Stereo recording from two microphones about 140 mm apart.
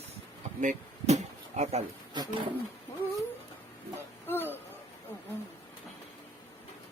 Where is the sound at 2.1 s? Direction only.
30° right (ahead or behind).